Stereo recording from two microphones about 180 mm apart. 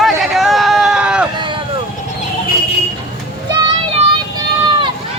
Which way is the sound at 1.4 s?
25° right (ahead or behind).